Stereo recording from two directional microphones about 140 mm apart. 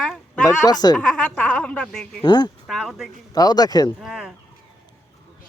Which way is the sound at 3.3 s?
25° left (ahead or behind).